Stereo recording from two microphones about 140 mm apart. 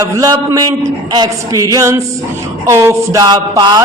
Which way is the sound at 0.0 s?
25° right (ahead or behind).